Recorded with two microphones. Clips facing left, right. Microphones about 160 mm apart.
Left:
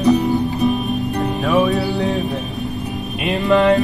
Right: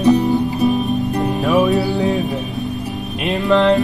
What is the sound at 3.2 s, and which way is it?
Music, centre (ahead or behind).